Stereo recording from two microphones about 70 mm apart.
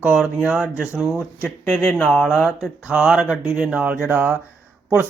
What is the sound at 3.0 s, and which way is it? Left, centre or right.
A man's voice, centre.